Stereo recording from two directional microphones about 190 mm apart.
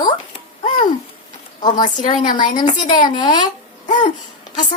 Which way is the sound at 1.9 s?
40° left (ahead or behind).